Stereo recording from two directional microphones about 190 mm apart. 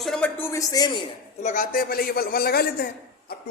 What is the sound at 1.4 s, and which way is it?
A man's voice, 40° left (ahead or behind).